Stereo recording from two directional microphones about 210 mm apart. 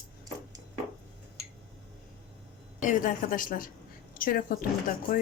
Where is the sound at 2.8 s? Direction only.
35° left (ahead or behind).